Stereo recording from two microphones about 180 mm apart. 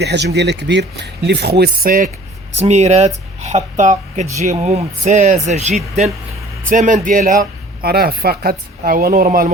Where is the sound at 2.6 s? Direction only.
40° right (ahead or behind).